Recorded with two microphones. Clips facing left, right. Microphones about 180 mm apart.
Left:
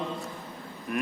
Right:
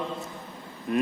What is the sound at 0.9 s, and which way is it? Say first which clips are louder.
Speech: right 5 dB; 25° right (ahead or behind).